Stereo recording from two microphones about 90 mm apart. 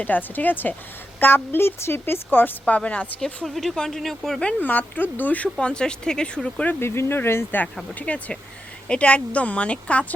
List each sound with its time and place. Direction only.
0.0 s a woman's voice: 20° left (ahead or behind)
3.2 s speech: 5° left (ahead or behind)
4.6 s speech: 20° left (ahead or behind)
6.7 s a woman's voice: 30° left (ahead or behind)
7.9 s speech: 15° left (ahead or behind)